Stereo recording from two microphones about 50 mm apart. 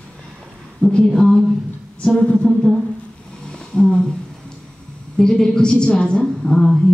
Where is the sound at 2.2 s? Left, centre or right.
Left.